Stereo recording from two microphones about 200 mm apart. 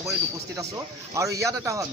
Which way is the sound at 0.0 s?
15° right (ahead or behind).